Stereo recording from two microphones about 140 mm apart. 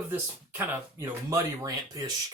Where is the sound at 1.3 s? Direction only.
25° right (ahead or behind).